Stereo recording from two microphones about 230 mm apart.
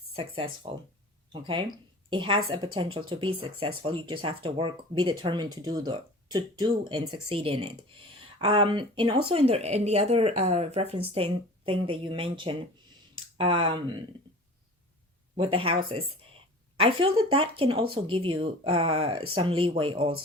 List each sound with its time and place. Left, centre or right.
0.7 s speech: right
15.4 s a woman's voice: right